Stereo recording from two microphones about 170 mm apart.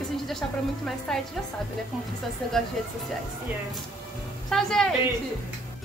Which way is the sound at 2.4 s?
5° left (ahead or behind).